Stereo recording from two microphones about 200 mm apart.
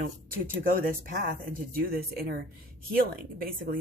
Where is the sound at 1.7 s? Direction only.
50° right (ahead or behind).